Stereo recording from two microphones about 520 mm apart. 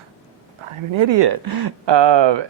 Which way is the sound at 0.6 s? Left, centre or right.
Right.